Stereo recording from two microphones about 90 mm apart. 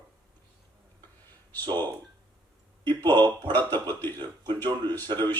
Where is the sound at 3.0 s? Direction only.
50° right (ahead or behind).